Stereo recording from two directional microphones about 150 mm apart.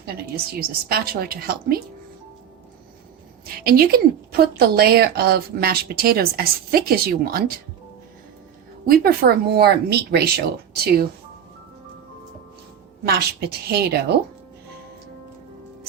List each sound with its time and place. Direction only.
0.6 s a woman's voice: 90° right
3.4 s a woman's voice: 90° right
8.9 s a woman's voice: 85° right
13.1 s a woman's voice: 90° right